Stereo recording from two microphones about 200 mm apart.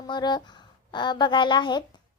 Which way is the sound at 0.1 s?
20° left (ahead or behind).